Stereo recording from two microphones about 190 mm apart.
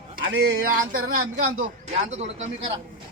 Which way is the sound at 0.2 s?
50° right (ahead or behind).